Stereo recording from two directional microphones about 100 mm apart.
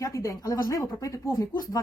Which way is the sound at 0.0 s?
30° left (ahead or behind).